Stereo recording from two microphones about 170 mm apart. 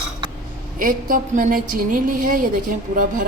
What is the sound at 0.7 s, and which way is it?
A woman's voice, 50° right (ahead or behind).